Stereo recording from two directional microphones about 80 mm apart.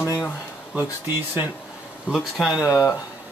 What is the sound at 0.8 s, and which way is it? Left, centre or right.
Speech, right.